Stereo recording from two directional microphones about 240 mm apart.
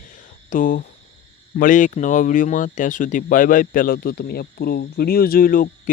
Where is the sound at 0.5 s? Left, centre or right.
Left.